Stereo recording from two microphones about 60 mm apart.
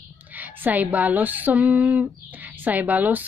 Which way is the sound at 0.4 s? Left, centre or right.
Right.